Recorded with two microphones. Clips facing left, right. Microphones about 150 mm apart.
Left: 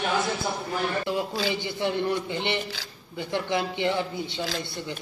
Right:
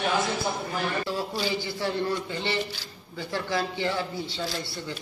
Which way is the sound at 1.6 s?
20° left (ahead or behind).